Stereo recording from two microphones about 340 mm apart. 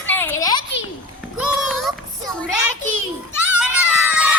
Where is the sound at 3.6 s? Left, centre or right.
Centre.